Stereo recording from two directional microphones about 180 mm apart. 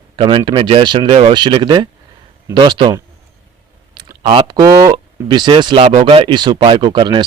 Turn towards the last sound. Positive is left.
turn(degrees=-25)  # may be behind; listen again after turning